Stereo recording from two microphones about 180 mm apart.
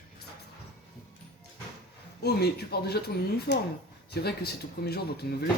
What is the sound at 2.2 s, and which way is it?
Speech, 65° left (ahead or behind).